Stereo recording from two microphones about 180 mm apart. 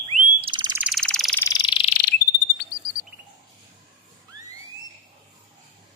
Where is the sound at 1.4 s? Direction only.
20° left (ahead or behind).